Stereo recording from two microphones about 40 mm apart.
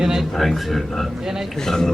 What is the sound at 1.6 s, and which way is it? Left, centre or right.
Speech, centre.